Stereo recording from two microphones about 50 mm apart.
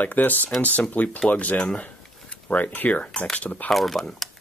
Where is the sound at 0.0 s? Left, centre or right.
Left.